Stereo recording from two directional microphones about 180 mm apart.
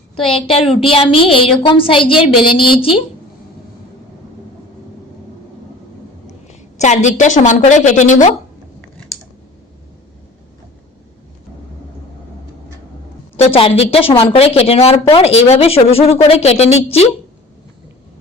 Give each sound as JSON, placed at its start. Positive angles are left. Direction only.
{"t": 0.2, "sound": "a woman's voice", "side_deg": 30}
{"t": 6.2, "sound": "a woman's voice", "side_deg": 40}
{"t": 13.3, "sound": "speech", "side_deg": 30}